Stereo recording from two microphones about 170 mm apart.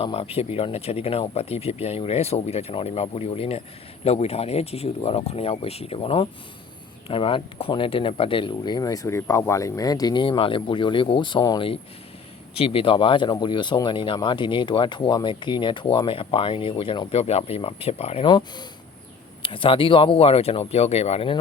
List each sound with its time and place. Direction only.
0.0 s speech: 35° left (ahead or behind)